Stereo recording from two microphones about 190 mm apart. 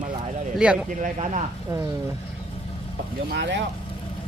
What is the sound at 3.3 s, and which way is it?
Speech, 70° right (ahead or behind).